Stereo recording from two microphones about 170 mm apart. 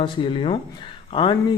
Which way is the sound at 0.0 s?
30° left (ahead or behind).